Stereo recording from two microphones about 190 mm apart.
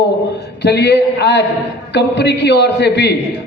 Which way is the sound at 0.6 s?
65° left (ahead or behind).